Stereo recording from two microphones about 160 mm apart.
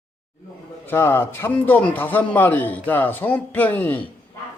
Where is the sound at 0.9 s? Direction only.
15° left (ahead or behind).